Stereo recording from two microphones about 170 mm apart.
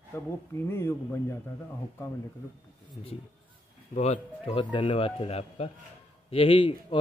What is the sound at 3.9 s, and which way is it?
Speech, 40° left (ahead or behind).